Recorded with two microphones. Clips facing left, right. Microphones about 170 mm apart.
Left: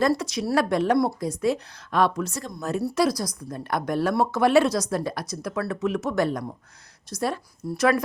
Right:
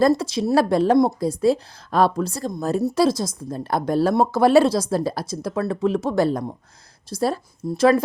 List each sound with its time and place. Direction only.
0.2 s a woman's voice: 30° right (ahead or behind)